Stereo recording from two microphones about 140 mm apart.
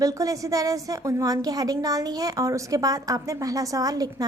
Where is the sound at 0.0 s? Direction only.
25° right (ahead or behind).